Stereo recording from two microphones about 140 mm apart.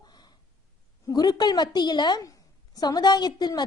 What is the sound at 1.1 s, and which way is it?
A woman's voice, 30° left (ahead or behind).